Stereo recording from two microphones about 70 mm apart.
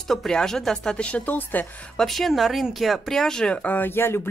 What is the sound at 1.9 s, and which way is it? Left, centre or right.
Speech, centre.